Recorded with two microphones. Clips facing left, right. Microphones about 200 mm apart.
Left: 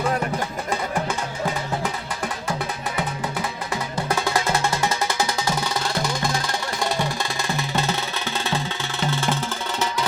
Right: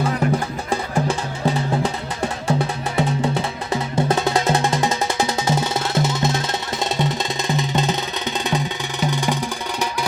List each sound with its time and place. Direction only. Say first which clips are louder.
3.7 s music: right 8 dB; 25° right (ahead or behind)